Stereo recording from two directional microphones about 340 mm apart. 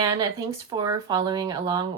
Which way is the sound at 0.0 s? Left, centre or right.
Centre.